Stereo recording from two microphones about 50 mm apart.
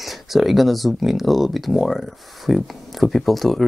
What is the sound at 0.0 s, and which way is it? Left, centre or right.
Speech, centre.